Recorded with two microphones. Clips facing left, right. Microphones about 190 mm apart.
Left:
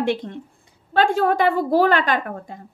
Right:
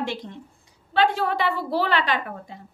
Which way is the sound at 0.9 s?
45° left (ahead or behind).